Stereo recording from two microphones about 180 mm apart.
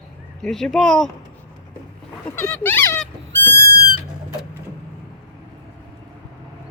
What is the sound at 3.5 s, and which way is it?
Cat, 65° right (ahead or behind).